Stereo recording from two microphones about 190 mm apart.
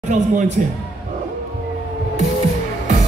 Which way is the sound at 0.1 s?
40° right (ahead or behind).